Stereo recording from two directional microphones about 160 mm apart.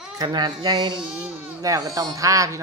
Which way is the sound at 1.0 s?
5° right (ahead or behind).